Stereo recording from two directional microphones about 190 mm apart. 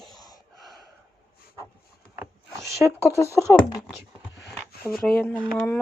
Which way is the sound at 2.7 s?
15° right (ahead or behind).